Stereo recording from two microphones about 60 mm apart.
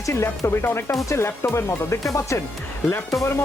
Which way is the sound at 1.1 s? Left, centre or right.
Left.